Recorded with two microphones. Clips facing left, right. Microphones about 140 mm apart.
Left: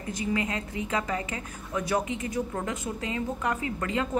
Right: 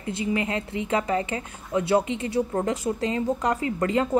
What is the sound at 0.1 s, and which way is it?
A woman's voice, 25° right (ahead or behind).